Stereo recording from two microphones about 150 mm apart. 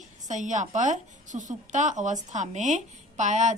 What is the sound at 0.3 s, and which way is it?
A woman's voice, 55° right (ahead or behind).